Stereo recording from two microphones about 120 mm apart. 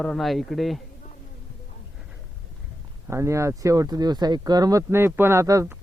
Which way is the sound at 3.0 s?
25° right (ahead or behind).